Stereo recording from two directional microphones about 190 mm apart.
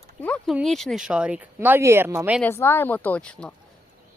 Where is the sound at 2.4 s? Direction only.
10° left (ahead or behind).